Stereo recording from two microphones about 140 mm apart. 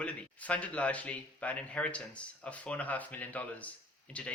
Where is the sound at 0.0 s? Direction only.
10° left (ahead or behind).